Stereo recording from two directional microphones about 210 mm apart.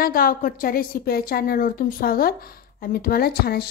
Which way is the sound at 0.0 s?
45° left (ahead or behind).